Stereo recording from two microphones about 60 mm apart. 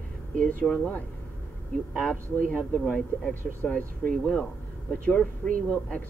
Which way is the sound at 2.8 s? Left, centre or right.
Left.